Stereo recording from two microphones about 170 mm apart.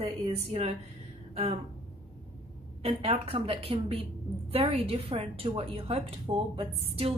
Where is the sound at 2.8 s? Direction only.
35° right (ahead or behind).